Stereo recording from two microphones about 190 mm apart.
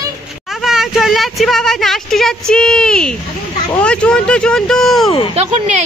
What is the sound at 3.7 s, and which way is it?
Speech, 5° left (ahead or behind).